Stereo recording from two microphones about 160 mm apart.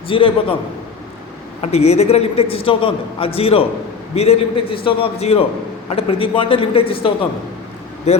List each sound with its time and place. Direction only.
0.1 s a man's voice: 35° left (ahead or behind)
1.6 s a man's voice: 40° left (ahead or behind)